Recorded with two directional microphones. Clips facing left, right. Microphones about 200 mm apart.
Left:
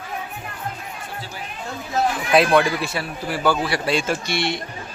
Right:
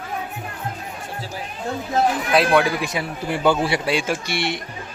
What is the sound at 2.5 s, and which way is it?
Speech, 10° right (ahead or behind).